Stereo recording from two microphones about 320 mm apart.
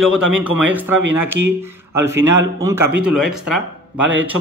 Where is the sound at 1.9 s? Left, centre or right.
Centre.